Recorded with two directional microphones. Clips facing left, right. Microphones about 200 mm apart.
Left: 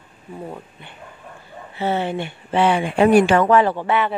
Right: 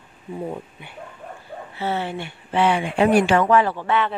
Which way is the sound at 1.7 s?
20° left (ahead or behind).